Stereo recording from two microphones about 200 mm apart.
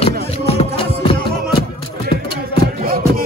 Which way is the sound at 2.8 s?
45° right (ahead or behind).